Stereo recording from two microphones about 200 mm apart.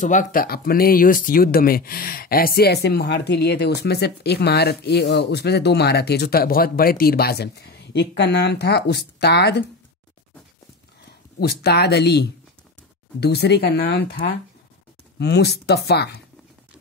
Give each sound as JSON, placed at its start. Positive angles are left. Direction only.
{"t": 0.0, "sound": "speech", "side_deg": 40}
{"t": 11.3, "sound": "speech", "side_deg": 55}